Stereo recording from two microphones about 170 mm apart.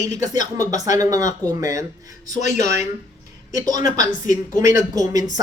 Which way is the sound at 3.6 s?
20° right (ahead or behind).